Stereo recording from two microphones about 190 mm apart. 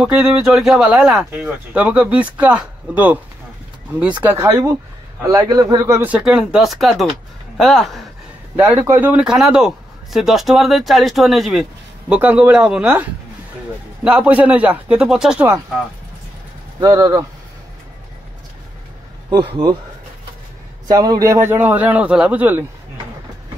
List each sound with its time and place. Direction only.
0.0 s speech: 5° right (ahead or behind)
8.5 s speech: 10° right (ahead or behind)
16.8 s speech: 20° right (ahead or behind)
19.3 s speech: 25° right (ahead or behind)
20.8 s speech: 20° right (ahead or behind)